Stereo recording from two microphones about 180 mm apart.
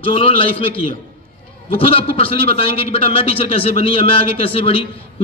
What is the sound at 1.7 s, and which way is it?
A man's voice, 30° left (ahead or behind).